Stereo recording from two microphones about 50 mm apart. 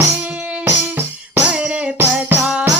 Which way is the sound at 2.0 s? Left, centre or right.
Right.